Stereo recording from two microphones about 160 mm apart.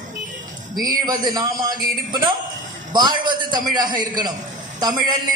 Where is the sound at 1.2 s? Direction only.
25° right (ahead or behind).